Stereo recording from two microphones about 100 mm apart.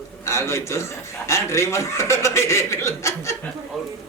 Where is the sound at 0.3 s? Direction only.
30° left (ahead or behind).